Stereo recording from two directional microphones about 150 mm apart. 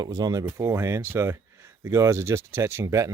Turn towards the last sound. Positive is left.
turn(degrees=-20)  # may be behind; listen again after turning